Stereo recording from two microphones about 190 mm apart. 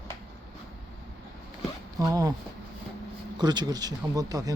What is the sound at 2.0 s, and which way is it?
Speech, 20° right (ahead or behind).